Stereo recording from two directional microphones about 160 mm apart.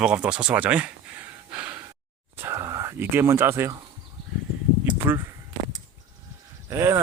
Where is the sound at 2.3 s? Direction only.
20° right (ahead or behind).